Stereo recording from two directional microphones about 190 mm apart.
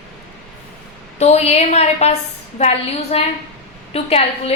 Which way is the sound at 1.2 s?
35° left (ahead or behind).